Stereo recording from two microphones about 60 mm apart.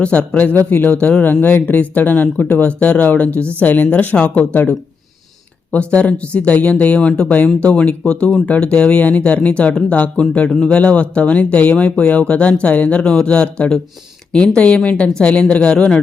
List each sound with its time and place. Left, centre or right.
0.0 s speech: centre
1.2 s speech: left
5.7 s speech: left